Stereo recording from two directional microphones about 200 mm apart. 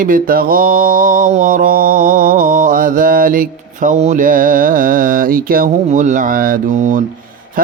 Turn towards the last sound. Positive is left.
turn(degrees=-40)  # may be behind; listen again after turning